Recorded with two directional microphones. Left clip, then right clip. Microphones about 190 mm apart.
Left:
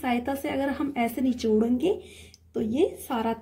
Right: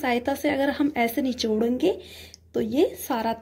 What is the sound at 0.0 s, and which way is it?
A woman's voice, 35° right (ahead or behind).